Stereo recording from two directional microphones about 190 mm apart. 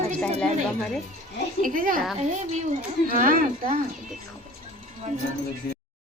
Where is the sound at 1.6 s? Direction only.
45° right (ahead or behind).